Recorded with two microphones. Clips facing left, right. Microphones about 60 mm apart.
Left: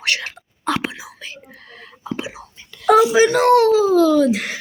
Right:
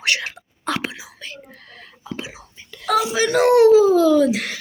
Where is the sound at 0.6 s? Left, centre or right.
Centre.